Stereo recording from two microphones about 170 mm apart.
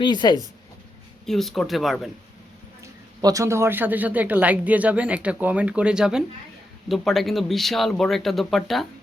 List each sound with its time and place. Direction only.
0.0 s speech: 25° left (ahead or behind)
1.3 s speech: centre (ahead or behind)
3.2 s speech: 20° right (ahead or behind); by 8.9 s centre (ahead or behind)